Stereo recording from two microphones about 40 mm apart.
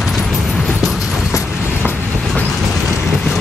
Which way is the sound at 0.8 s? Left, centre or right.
Centre.